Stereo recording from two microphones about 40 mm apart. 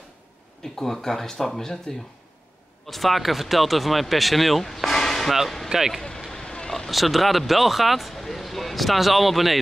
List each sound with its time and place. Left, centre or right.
0.7 s speech: centre
2.9 s speech: centre
4.9 s a sound: centre
5.7 s speech: centre
6.2 s vehicle: centre
6.9 s speech: centre